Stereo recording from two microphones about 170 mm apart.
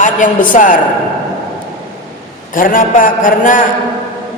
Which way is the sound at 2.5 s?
50° left (ahead or behind).